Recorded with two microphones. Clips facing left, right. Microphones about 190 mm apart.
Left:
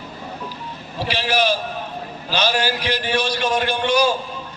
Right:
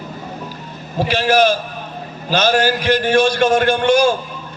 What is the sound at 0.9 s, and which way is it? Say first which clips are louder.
A man's voice: right 7 dB; 45° right (ahead or behind).